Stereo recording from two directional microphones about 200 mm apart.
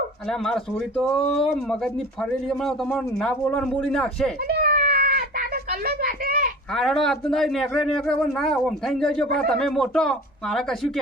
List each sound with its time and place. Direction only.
0.3 s speech: centre (ahead or behind)
4.4 s a sound: 50° right (ahead or behind)
6.7 s speech: centre (ahead or behind)